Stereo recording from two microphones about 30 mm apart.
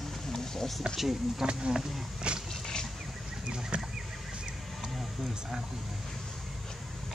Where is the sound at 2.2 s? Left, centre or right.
Right.